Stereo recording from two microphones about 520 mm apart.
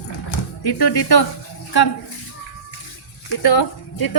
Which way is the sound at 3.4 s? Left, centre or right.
Left.